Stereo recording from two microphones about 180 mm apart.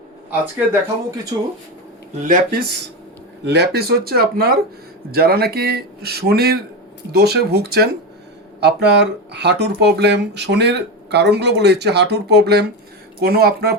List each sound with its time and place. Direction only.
0.3 s speech: 15° right (ahead or behind)
2.2 s speech: 50° right (ahead or behind)